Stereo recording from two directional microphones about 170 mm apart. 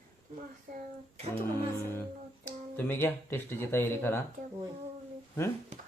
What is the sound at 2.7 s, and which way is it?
Speech, 10° left (ahead or behind).